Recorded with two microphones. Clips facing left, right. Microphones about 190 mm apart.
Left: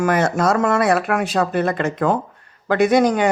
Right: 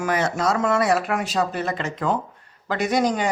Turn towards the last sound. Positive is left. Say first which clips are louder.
# left 6 dB
turn(degrees=60)  # may be behind; listen again after turning